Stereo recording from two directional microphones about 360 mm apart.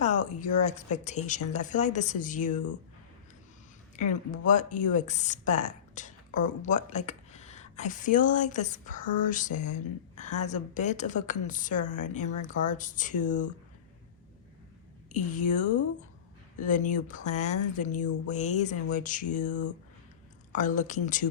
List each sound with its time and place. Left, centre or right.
0.0 s speech: centre
3.9 s speech: centre
15.1 s speech: left
16.6 s speech: left
17.9 s speech: left
18.3 s speech: centre